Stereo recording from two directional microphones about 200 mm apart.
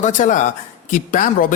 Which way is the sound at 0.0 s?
40° left (ahead or behind).